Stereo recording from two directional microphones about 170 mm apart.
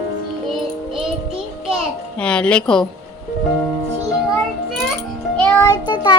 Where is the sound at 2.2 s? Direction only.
5° left (ahead or behind).